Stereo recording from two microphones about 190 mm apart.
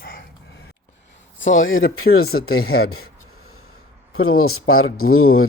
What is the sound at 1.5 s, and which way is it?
Speech, 90° left.